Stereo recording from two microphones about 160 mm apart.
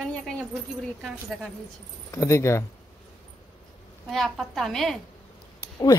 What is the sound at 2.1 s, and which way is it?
Speech, 20° left (ahead or behind).